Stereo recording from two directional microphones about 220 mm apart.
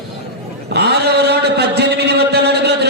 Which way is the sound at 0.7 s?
50° right (ahead or behind).